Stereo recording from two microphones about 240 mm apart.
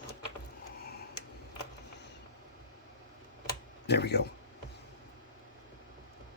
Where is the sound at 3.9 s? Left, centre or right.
Left.